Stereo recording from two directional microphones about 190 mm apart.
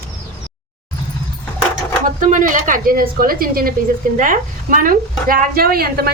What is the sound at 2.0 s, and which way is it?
A woman's voice, 45° right (ahead or behind).